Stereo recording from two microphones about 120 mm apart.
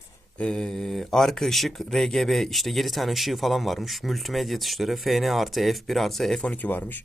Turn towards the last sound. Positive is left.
turn(degrees=15)  # may be behind; listen again after turning